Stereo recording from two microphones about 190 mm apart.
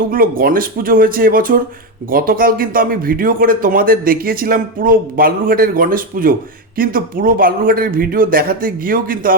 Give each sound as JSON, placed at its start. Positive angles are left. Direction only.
{"t": 0.1, "sound": "a man's voice", "side_deg": -50}